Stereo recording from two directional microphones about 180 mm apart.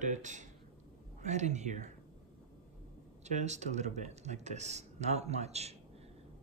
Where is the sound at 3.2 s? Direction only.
40° right (ahead or behind).